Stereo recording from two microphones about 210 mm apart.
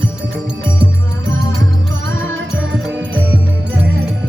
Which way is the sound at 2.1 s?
70° right (ahead or behind).